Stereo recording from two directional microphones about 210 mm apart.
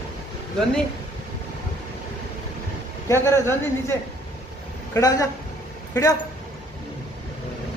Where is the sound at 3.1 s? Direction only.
15° left (ahead or behind).